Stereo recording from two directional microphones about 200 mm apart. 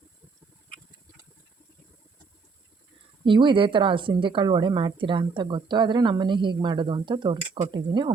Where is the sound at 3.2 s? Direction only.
25° right (ahead or behind).